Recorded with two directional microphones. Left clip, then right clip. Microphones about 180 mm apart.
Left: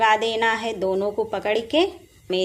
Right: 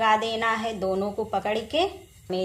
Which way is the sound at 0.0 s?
45° left (ahead or behind).